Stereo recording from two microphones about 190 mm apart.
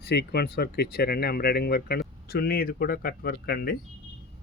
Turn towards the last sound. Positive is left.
turn(degrees=55)  # may be behind; listen again after turning